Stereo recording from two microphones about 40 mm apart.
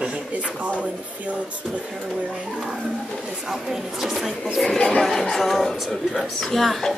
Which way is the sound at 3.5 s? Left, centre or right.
Centre.